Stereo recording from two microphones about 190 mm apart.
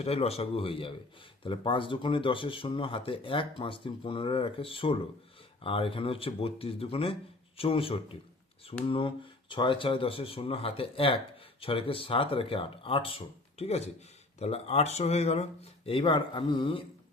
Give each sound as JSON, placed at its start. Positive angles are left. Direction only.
{"t": 0.0, "sound": "speech", "side_deg": 30}